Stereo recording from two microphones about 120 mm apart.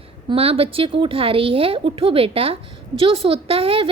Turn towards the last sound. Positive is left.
turn(degrees=-50)  # may be behind; listen again after turning